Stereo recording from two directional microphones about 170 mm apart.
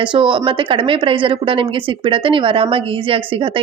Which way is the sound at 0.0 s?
30° right (ahead or behind).